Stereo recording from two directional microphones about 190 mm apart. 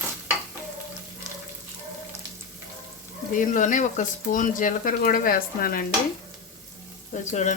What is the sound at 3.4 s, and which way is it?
Speech, 45° left (ahead or behind).